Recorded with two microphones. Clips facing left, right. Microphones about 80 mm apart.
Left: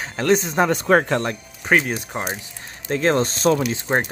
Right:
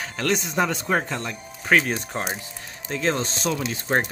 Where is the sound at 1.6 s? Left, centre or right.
Centre.